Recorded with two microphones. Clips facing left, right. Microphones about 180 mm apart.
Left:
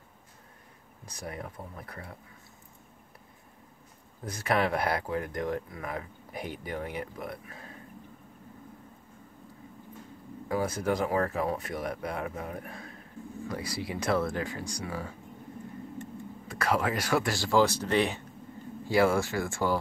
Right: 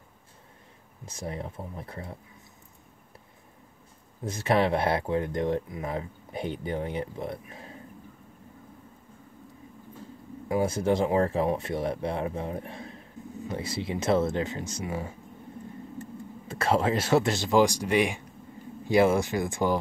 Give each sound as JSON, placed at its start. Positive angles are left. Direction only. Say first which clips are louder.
{"t": 1.0, "sound": "speech", "louder": "right 4 dB", "side_deg": -25}
{"t": 4.2, "sound": "speech", "louder": "right 4 dB", "side_deg": -25}
{"t": 10.5, "sound": "speech", "louder": "right 4 dB", "side_deg": -25}